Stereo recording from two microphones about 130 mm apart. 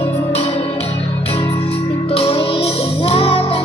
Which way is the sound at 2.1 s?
45° left (ahead or behind).